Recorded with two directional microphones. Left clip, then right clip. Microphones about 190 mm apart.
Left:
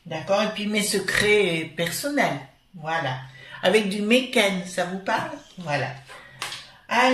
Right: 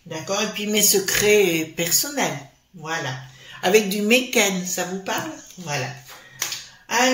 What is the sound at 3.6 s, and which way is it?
Speech, 50° right (ahead or behind).